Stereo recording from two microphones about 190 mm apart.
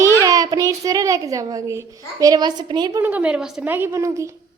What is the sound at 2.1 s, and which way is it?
Speech, 20° right (ahead or behind).